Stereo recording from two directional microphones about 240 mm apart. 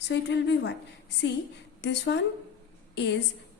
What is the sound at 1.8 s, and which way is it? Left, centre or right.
Speech, left.